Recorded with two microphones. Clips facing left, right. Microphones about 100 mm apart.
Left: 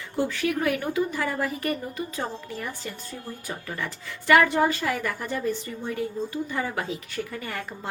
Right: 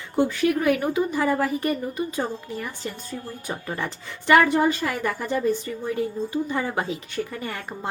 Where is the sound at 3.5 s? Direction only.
25° right (ahead or behind).